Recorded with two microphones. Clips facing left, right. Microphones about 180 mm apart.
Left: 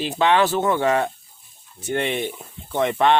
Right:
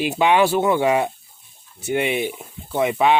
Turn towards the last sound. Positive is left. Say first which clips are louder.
# right 1 dB
turn(degrees=-10)  # may be behind; listen again after turning